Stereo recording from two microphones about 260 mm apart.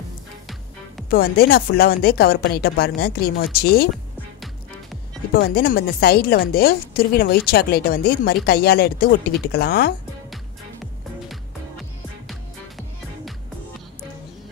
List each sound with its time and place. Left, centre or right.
1.1 s a woman's voice: left
5.3 s a woman's voice: left
10.3 s music: centre